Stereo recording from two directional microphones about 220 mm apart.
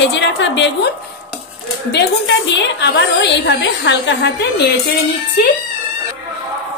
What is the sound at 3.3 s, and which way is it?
A woman's voice, 55° left (ahead or behind).